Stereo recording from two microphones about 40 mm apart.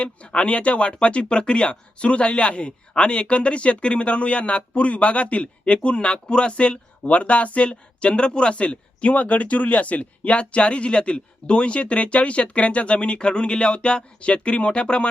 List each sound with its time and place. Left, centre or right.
0.0 s speech: left